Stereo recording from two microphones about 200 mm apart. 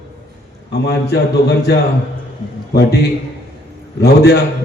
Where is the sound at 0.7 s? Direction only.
55° left (ahead or behind).